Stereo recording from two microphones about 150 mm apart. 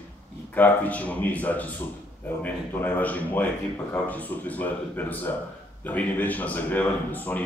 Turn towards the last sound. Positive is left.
turn(degrees=10)  # may be behind; listen again after turning